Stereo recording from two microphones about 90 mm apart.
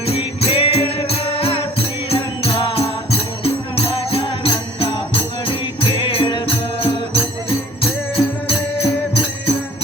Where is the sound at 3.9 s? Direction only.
85° left.